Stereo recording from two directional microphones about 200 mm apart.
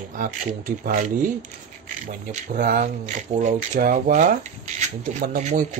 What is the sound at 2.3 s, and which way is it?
Speech, 40° right (ahead or behind).